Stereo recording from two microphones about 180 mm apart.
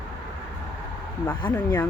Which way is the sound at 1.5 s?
15° left (ahead or behind).